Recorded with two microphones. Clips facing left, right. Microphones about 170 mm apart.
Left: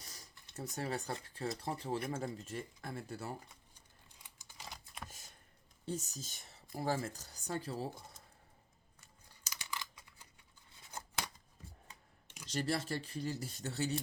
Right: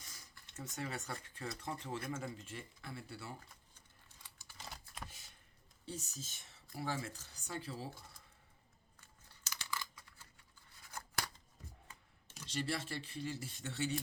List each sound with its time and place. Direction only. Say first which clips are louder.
0.0 s a sound: left 3 dB; 40° left (ahead or behind)
0.4 s speech: left 4 dB; 35° left (ahead or behind)
3.8 s a sound: left 1 dB; 15° left (ahead or behind)
4.5 s typing: even; centre (ahead or behind)
5.0 s a sound: left 2 dB; 45° left (ahead or behind)
5.8 s speech: left 6 dB; 45° left (ahead or behind)
9.3 s computer keyboard: right 1 dB; 15° left (ahead or behind)
10.8 s scissors: left 1 dB; 20° left (ahead or behind)
12.5 s speech: left 4 dB; 40° left (ahead or behind)